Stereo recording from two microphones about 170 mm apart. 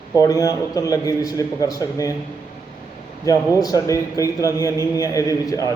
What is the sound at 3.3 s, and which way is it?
A man's voice, 20° left (ahead or behind).